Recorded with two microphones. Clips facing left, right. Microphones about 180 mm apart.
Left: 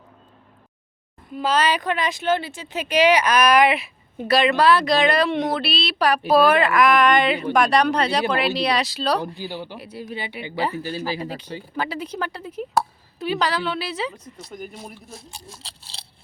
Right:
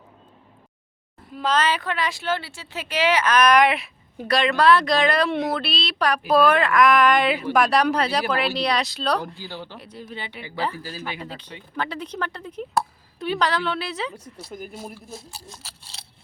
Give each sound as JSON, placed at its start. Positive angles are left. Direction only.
{"t": 1.4, "sound": "speech", "side_deg": 10}
{"t": 9.2, "sound": "speech", "side_deg": 15}
{"t": 11.2, "sound": "speech", "side_deg": 10}
{"t": 15.6, "sound": "speech", "side_deg": 30}